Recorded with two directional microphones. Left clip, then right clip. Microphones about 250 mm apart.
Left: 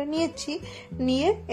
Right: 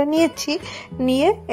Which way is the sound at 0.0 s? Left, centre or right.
Right.